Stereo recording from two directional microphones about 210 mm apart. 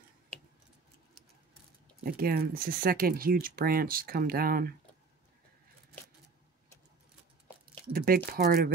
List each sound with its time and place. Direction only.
2.0 s speech: 45° right (ahead or behind)
7.9 s a sound: 45° right (ahead or behind)
8.3 s speech: 45° right (ahead or behind)